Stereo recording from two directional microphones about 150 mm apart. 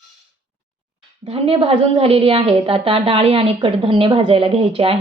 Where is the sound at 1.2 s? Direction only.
40° right (ahead or behind).